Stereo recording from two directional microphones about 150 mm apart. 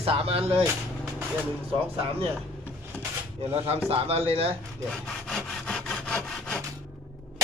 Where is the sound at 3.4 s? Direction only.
40° right (ahead or behind).